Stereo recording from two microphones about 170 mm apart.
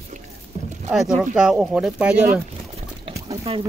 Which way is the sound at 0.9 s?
5° right (ahead or behind).